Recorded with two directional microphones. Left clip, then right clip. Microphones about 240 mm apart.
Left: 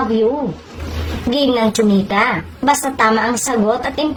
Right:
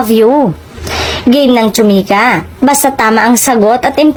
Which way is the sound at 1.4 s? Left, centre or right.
Right.